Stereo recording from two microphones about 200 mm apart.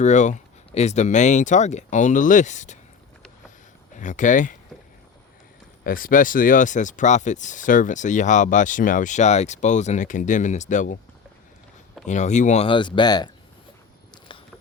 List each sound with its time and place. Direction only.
0.0 s speech: 35° left (ahead or behind)
3.9 s speech: 40° left (ahead or behind)
5.8 s speech: 45° left (ahead or behind)
12.0 s speech: 35° left (ahead or behind)